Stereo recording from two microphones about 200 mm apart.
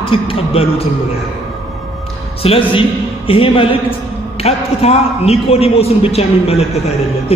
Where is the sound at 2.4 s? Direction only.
25° left (ahead or behind).